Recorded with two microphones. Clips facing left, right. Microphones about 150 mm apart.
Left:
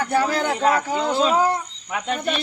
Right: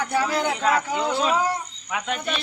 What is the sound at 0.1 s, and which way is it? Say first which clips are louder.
A man's voice: left 3 dB; 45° left (ahead or behind).